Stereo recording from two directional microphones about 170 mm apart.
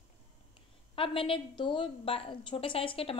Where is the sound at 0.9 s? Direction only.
30° left (ahead or behind).